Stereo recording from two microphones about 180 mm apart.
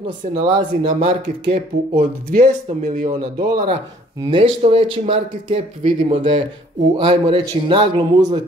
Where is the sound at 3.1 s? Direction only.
25° right (ahead or behind).